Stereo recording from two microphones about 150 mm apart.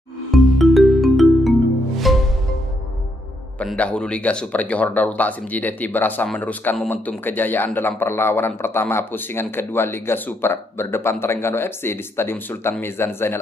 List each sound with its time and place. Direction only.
0.3 s music: centre (ahead or behind)
3.5 s a man's voice: 10° left (ahead or behind)